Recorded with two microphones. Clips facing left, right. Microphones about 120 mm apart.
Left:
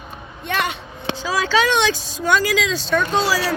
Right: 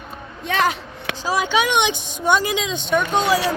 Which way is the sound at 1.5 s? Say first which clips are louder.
Left 3 dB; 15° right (ahead or behind).